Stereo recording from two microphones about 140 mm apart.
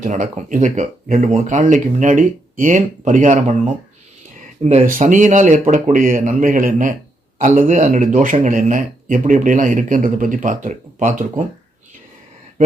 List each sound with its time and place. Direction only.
0.0 s speech: 60° right (ahead or behind)
4.6 s speech: 65° right (ahead or behind)